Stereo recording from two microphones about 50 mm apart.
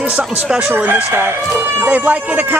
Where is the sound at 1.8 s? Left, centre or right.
Right.